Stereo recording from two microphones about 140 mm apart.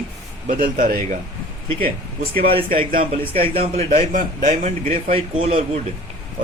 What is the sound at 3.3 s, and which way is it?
A man's voice, 45° right (ahead or behind).